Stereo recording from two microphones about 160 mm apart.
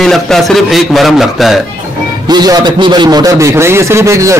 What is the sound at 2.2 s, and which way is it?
A man's voice, 25° right (ahead or behind).